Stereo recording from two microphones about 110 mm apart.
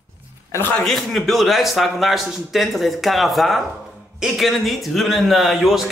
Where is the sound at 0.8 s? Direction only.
5° left (ahead or behind).